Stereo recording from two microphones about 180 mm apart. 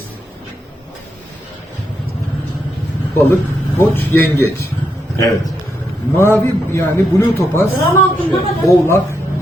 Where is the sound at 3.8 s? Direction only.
10° left (ahead or behind).